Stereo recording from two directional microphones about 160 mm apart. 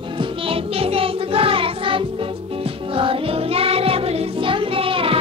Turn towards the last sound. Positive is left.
turn(degrees=-35)  # may be behind; listen again after turning